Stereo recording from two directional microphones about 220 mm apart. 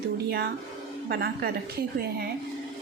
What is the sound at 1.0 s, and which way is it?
Speech, 45° right (ahead or behind).